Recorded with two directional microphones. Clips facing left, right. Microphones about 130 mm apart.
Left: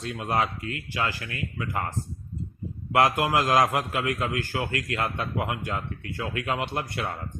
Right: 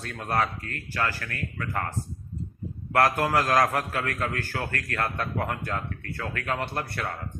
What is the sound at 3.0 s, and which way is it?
A man's voice, 15° left (ahead or behind).